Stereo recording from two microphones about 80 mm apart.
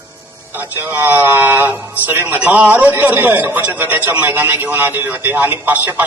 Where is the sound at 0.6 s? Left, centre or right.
Right.